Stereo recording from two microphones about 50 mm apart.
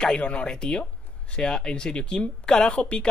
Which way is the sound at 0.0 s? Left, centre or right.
Left.